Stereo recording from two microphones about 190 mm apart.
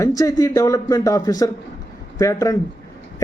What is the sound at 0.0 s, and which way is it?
A woman's voice, 15° left (ahead or behind).